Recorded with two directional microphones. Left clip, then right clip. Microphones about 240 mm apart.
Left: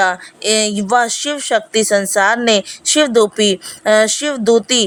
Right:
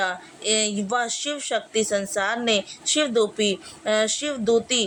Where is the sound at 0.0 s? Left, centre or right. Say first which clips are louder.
Left 10 dB; left.